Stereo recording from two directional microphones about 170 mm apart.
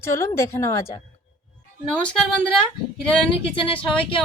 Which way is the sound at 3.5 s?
30° left (ahead or behind).